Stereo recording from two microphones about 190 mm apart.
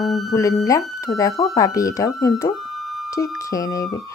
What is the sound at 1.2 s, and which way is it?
A woman's voice, 20° left (ahead or behind).